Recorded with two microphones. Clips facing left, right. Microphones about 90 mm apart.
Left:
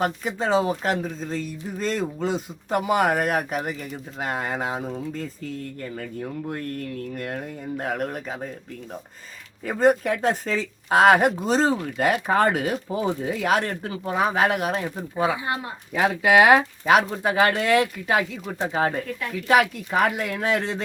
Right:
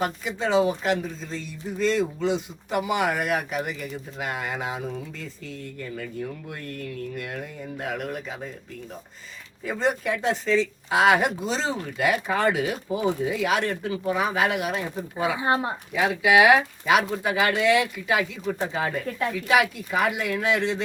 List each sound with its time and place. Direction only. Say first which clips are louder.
0.0 s speech: left 2 dB; 40° left (ahead or behind)
9.6 s speech: left 5 dB; 45° left (ahead or behind)
15.4 s speech: right 5 dB; 30° right (ahead or behind)
16.0 s speech: left 1 dB; 45° left (ahead or behind)